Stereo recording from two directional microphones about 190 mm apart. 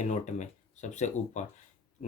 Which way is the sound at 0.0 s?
40° left (ahead or behind).